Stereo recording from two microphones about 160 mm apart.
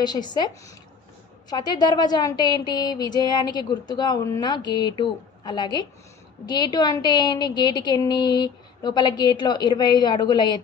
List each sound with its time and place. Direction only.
0.0 s a woman's voice: 25° left (ahead or behind)